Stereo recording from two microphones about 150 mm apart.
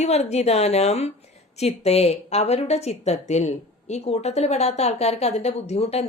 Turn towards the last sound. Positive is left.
turn(degrees=45)  # may be behind; listen again after turning